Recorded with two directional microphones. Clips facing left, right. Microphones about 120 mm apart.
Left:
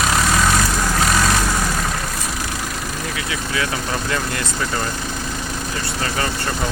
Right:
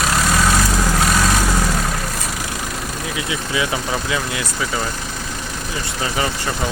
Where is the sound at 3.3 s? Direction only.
15° right (ahead or behind).